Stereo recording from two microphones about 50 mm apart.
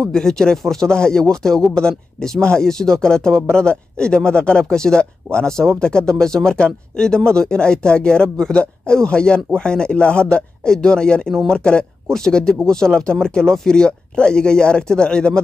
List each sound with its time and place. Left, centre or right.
0.1 s speech: centre